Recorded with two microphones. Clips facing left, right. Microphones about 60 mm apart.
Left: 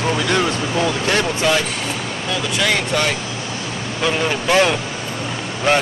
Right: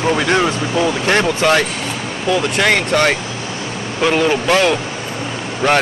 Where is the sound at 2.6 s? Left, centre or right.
Right.